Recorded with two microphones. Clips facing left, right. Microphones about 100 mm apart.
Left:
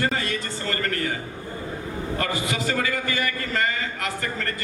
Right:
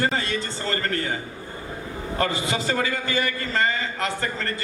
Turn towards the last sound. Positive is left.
turn(degrees=-30)  # may be behind; listen again after turning